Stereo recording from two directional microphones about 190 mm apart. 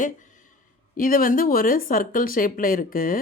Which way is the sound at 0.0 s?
45° left (ahead or behind).